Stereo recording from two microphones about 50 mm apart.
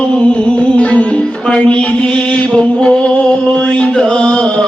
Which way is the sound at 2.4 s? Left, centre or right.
Left.